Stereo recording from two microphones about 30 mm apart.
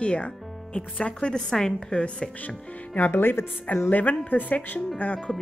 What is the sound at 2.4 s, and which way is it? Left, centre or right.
Speech, left.